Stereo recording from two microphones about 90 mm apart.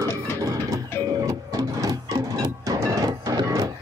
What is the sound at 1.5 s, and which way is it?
Music, 45° right (ahead or behind).